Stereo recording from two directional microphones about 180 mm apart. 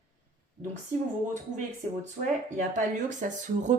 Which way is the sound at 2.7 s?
45° right (ahead or behind).